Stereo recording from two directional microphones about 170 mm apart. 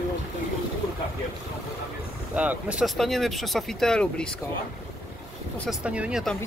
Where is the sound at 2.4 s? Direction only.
10° right (ahead or behind).